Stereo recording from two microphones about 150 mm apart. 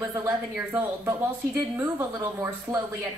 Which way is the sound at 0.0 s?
20° right (ahead or behind).